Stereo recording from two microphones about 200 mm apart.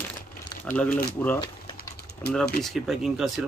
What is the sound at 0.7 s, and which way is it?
Speech, 5° left (ahead or behind).